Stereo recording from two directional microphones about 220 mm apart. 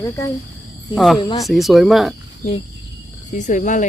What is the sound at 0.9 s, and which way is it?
Speech, centre (ahead or behind).